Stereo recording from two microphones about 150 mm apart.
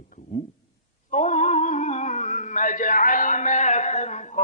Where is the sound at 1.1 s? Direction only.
55° left (ahead or behind).